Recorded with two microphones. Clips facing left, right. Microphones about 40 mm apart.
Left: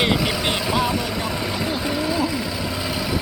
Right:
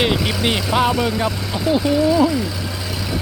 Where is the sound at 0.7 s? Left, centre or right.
Right.